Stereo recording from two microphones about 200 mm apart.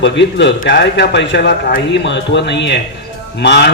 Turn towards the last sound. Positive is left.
turn(degrees=60)  # may be behind; listen again after turning